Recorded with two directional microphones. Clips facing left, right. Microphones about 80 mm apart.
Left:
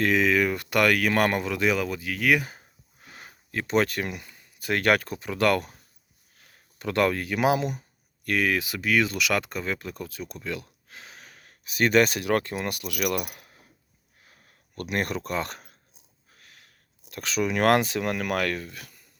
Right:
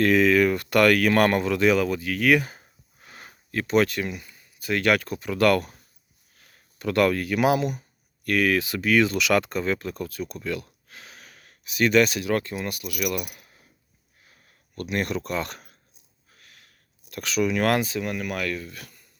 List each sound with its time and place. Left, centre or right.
0.0 s speech: centre
2.6 s a sound: centre
3.7 s speech: left
4.1 s speech: left
6.7 s speech: left
8.5 s speech: centre; by 13.6 s left
14.8 s speech: left
16.3 s a sound: left
17.1 s speech: left
17.5 s speech: left